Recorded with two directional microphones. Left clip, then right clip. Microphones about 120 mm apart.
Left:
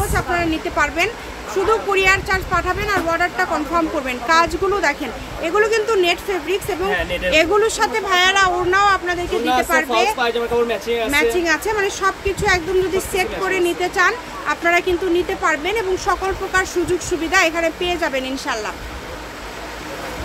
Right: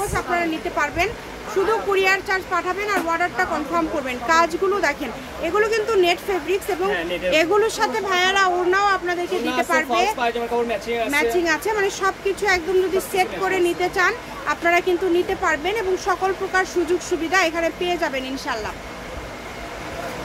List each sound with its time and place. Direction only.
0.1 s speech: 10° left (ahead or behind)
10.1 s speech: 20° left (ahead or behind)
11.1 s speech: centre (ahead or behind)